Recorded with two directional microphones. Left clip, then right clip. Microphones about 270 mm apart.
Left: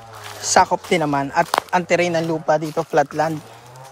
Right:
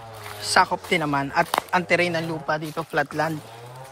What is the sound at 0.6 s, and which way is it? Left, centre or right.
Speech, left.